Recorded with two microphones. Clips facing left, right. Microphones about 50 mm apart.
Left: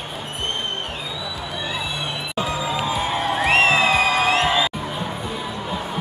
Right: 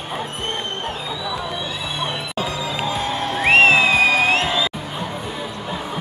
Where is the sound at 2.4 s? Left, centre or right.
Centre.